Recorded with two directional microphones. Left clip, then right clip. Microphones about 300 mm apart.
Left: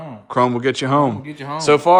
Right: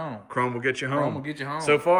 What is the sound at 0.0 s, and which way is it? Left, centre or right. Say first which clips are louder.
A man's voice: left 9 dB; centre.